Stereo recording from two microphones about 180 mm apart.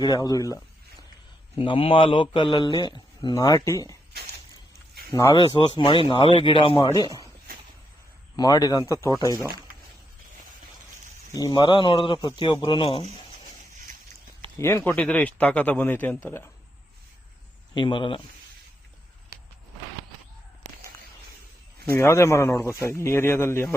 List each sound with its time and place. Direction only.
0.0 s a man's voice: 20° left (ahead or behind)
1.5 s a man's voice: 30° left (ahead or behind)
5.4 s a man's voice: 30° left (ahead or behind)
8.4 s a man's voice: 20° left (ahead or behind)
11.3 s a man's voice: 20° left (ahead or behind)
14.6 s a man's voice: 10° left (ahead or behind)
17.7 s a man's voice: 25° left (ahead or behind)
21.9 s a man's voice: 15° left (ahead or behind)